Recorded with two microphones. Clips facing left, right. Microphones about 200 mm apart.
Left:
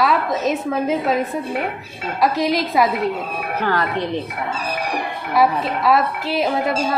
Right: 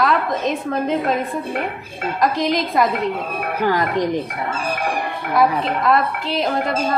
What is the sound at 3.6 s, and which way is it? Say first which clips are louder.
Speech: right 3 dB; 15° right (ahead or behind).